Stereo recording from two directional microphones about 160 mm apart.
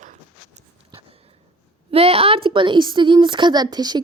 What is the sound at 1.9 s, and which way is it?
A woman's voice, 35° right (ahead or behind).